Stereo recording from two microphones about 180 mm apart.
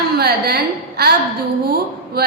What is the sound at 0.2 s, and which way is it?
A woman's voice, 60° right (ahead or behind).